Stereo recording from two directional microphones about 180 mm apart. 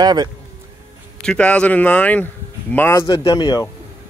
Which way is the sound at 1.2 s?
5° left (ahead or behind).